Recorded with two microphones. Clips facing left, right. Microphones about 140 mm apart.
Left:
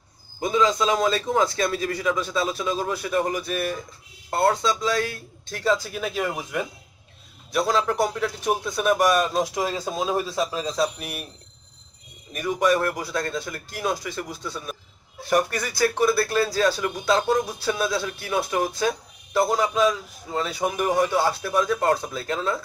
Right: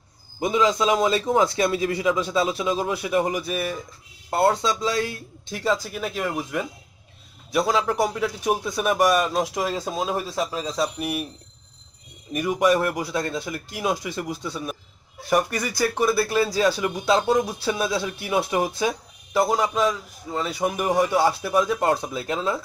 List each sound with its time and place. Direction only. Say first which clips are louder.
0.4 s speech: right 1 dB; 20° right (ahead or behind)
4.3 s speech: right 1 dB; 15° right (ahead or behind)
12.3 s speech: right 2 dB; 10° right (ahead or behind)